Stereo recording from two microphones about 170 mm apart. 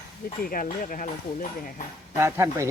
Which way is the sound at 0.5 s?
55° left (ahead or behind).